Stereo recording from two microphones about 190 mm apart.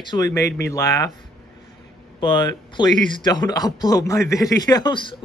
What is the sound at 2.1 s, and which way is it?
Speech, 25° left (ahead or behind).